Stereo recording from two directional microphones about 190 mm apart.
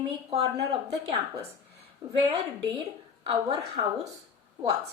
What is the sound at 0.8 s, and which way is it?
A woman's voice, 20° right (ahead or behind).